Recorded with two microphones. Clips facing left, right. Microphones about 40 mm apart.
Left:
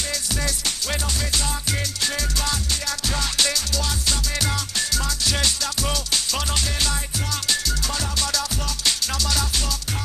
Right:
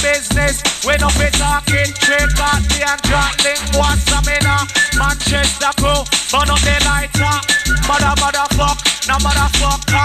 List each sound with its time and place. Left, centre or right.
0.0 s music: right